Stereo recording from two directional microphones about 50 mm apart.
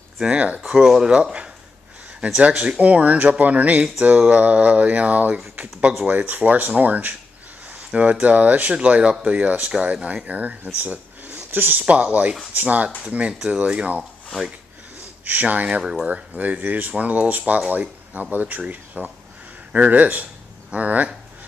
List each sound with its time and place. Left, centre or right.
0.2 s speech: right
0.6 s speech: centre
6.0 s speech: right
11.8 s speech: right
15.2 s speech: right
15.8 s speech: centre
16.1 s speech: right